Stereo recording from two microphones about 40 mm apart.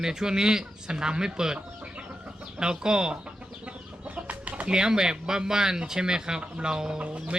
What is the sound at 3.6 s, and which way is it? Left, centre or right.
Chicken, right.